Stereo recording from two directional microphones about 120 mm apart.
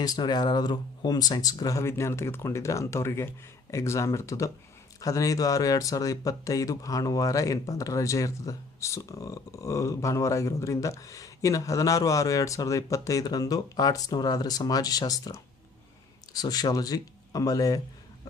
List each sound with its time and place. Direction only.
0.0 s speech: 35° left (ahead or behind)